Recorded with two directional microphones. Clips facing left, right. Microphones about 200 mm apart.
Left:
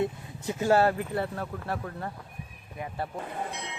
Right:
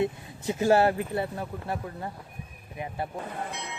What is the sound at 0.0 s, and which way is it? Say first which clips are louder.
Speech: right 2 dB; 25° right (ahead or behind).